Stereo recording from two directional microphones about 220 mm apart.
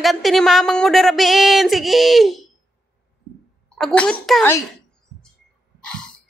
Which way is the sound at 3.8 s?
5° left (ahead or behind).